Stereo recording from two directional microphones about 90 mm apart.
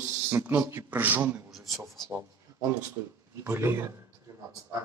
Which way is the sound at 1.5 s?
Centre (ahead or behind).